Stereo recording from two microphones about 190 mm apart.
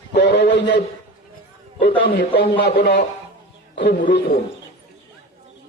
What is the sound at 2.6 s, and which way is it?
A man's voice, 60° left (ahead or behind).